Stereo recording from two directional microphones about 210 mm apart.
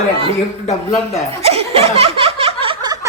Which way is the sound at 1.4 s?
30° right (ahead or behind).